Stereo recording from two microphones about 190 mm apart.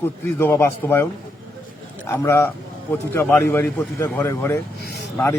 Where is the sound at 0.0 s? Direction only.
15° left (ahead or behind).